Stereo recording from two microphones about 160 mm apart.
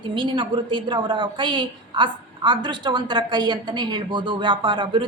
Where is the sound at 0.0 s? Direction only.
30° right (ahead or behind).